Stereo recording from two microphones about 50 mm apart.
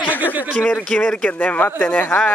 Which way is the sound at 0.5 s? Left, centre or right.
Left.